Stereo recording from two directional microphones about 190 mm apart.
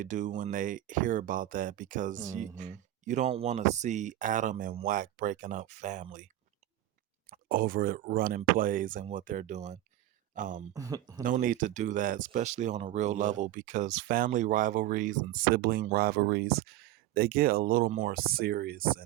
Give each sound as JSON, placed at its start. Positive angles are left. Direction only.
{"t": 0.0, "sound": "speech", "side_deg": -40}
{"t": 7.3, "sound": "speech", "side_deg": -50}
{"t": 10.8, "sound": "speech", "side_deg": -20}
{"t": 11.2, "sound": "speech", "side_deg": -45}